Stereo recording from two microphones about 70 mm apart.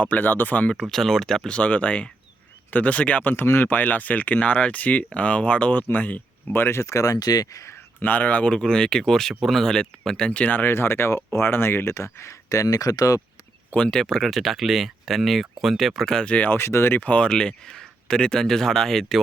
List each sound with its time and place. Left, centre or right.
0.0 s speech: left
0.9 s speech: centre
1.5 s speech: centre
6.5 s speech: left
7.9 s speech: left
13.7 s speech: centre
16.2 s speech: centre
16.5 s speech: left; by 19.2 s centre